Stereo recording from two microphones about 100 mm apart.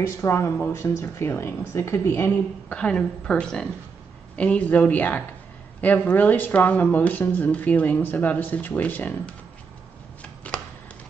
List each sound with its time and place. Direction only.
0.0 s speech: 25° left (ahead or behind)
2.7 s speech: 10° left (ahead or behind)
10.4 s a sound: 15° left (ahead or behind)